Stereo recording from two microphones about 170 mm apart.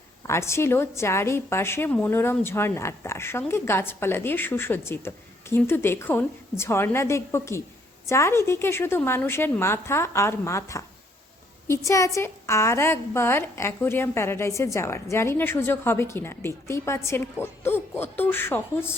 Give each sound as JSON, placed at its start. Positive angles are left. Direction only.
{"t": 0.2, "sound": "a woman's voice", "side_deg": 15}